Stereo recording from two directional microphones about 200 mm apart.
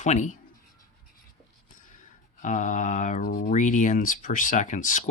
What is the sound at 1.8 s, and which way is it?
Speech, 40° left (ahead or behind).